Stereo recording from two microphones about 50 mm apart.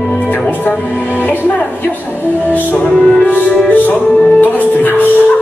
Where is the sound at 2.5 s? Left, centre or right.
Left.